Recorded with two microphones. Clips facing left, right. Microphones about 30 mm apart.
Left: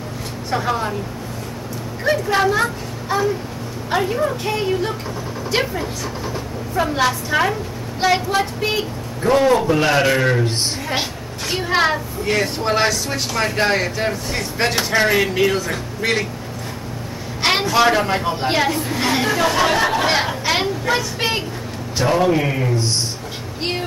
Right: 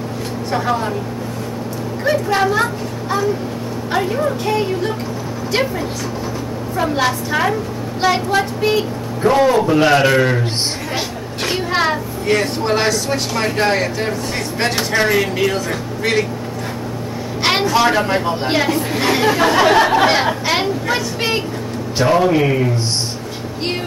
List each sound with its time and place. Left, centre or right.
0.5 s speech: centre
2.0 s speech: centre
9.2 s a man's voice: centre
11.5 s speech: centre
17.4 s a man's voice: centre
18.9 s chatter: centre
19.2 s a man's voice: right
20.4 s a sound: centre
21.9 s a man's voice: centre